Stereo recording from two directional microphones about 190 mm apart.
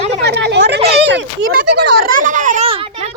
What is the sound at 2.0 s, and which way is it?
A child's voice, 45° right (ahead or behind).